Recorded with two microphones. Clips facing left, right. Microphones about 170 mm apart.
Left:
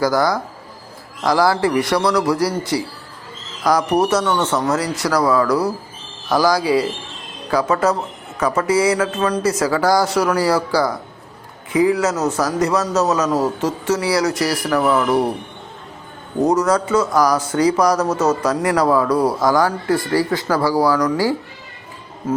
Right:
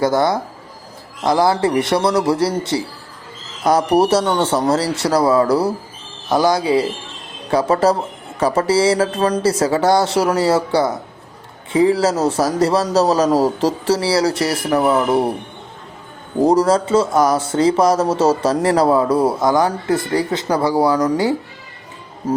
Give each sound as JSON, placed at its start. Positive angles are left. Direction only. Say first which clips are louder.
{"t": 0.0, "sound": "speech", "louder": "right 1 dB", "side_deg": -25}
{"t": 16.4, "sound": "speech", "louder": "right 2 dB", "side_deg": -30}